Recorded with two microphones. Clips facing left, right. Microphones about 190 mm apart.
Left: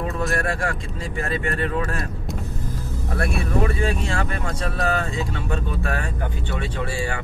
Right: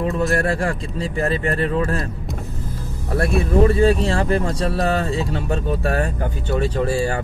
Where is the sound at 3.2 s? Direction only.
35° right (ahead or behind).